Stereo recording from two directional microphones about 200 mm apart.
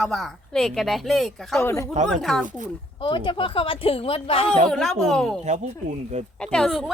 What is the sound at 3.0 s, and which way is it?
Speech, 25° left (ahead or behind).